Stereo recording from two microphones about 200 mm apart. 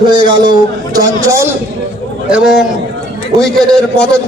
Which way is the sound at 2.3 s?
Centre (ahead or behind).